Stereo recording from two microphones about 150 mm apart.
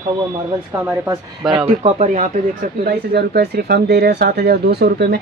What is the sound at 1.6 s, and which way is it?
Speech, 45° right (ahead or behind).